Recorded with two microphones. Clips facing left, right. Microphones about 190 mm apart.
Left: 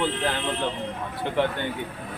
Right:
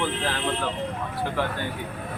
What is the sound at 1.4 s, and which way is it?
Speech, 25° left (ahead or behind).